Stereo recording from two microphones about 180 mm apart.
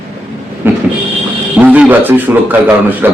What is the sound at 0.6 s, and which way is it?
Train, 10° right (ahead or behind).